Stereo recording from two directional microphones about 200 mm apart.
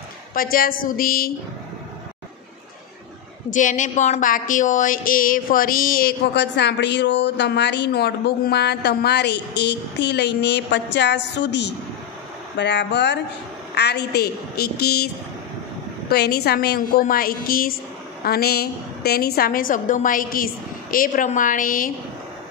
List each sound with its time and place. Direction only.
0.3 s a woman's voice: 45° left (ahead or behind)
3.4 s a woman's voice: 40° left (ahead or behind)
16.1 s a woman's voice: 55° left (ahead or behind)